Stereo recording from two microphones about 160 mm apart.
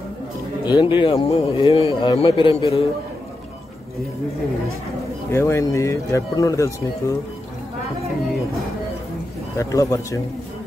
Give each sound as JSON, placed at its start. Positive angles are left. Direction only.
{"t": 0.7, "sound": "speech", "side_deg": 30}
{"t": 5.3, "sound": "speech", "side_deg": 15}
{"t": 9.6, "sound": "speech", "side_deg": 20}